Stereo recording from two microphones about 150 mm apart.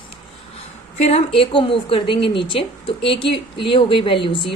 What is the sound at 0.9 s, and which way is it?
A woman's voice, 45° left (ahead or behind).